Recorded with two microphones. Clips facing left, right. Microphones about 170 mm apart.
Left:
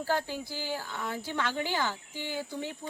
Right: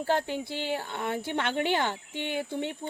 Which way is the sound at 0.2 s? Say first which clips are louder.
Right 4 dB; 60° right (ahead or behind).